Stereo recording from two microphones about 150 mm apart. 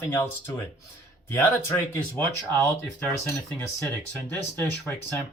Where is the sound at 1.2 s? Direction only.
15° left (ahead or behind).